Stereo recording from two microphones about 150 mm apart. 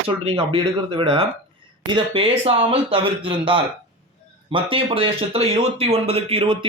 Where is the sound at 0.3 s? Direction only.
40° right (ahead or behind).